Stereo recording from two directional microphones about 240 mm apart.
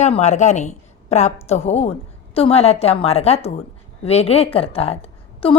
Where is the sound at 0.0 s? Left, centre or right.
Left.